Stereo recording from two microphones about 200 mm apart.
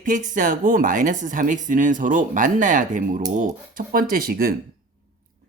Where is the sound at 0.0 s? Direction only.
40° right (ahead or behind).